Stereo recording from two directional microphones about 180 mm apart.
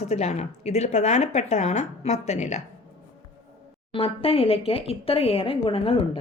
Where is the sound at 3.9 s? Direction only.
30° left (ahead or behind).